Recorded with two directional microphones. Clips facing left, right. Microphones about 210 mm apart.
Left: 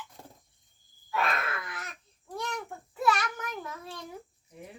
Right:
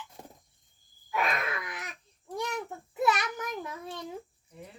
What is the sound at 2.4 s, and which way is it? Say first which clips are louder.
A child's voice: right 2 dB; 15° right (ahead or behind).